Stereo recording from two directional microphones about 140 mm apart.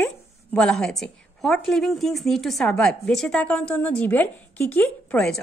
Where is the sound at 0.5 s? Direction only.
5° left (ahead or behind).